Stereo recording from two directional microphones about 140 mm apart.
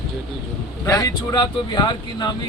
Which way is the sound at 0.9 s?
30° left (ahead or behind).